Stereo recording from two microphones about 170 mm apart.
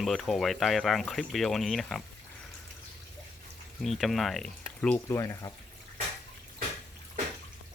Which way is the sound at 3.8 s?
Centre (ahead or behind).